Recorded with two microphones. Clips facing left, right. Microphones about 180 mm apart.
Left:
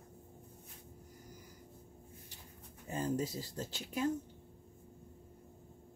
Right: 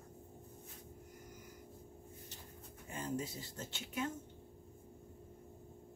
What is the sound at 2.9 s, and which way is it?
Speech, 35° left (ahead or behind).